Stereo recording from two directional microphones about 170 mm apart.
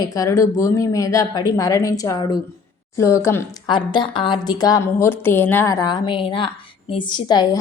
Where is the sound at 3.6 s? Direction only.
25° left (ahead or behind).